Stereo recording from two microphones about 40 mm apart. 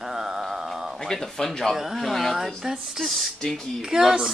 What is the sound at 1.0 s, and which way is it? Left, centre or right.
Speech, centre.